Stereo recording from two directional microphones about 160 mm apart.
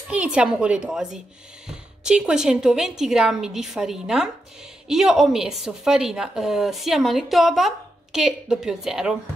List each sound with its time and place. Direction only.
0.1 s a woman's voice: 5° right (ahead or behind)